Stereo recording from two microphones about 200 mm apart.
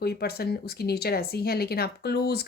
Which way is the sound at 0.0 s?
50° left (ahead or behind).